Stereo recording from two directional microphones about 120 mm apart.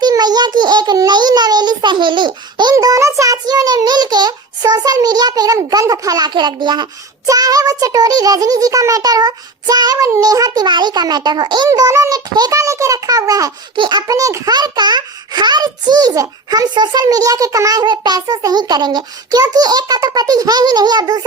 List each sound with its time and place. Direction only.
0.0 s a sound: 35° right (ahead or behind)
2.7 s a child's voice: 25° right (ahead or behind)
11.7 s a child's voice: 25° right (ahead or behind)